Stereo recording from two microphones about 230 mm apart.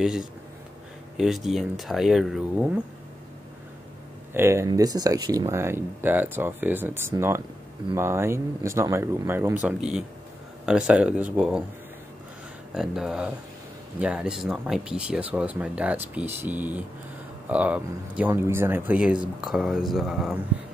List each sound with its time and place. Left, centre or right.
0.0 s speech: centre
4.3 s speech: centre
12.7 s speech: centre